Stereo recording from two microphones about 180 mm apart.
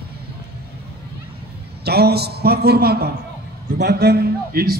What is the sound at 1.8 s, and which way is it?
A man's voice, 60° right (ahead or behind).